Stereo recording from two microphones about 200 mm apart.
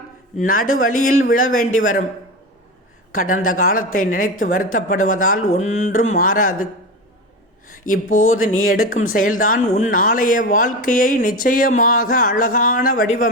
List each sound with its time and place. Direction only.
0.3 s speech: 45° left (ahead or behind)
3.1 s speech: 40° left (ahead or behind)
7.9 s speech: 40° left (ahead or behind)